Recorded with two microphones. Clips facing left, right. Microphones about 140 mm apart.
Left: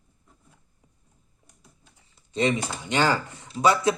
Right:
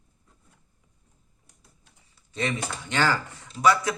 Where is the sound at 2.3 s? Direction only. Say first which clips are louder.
Left 5 dB; 20° left (ahead or behind).